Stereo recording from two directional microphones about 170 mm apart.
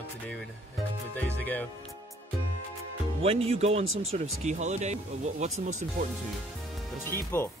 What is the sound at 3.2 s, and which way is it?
Speech, 35° right (ahead or behind).